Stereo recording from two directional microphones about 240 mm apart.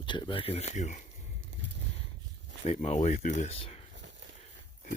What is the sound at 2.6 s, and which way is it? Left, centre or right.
Speech, left.